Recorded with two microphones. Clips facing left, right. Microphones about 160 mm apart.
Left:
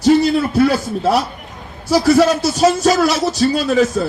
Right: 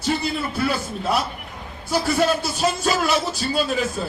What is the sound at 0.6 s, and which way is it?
Music, 40° left (ahead or behind).